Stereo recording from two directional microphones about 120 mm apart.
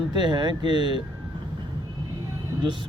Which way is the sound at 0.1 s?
40° right (ahead or behind).